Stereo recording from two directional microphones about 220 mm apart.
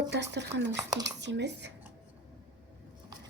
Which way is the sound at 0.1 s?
50° right (ahead or behind).